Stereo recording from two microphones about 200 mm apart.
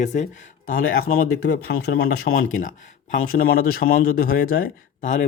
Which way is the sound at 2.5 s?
40° left (ahead or behind).